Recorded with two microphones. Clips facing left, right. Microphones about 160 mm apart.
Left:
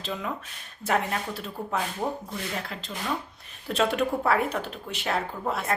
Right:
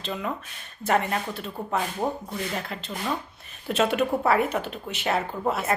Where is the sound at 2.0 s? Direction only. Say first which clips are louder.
Right 2 dB; 15° right (ahead or behind).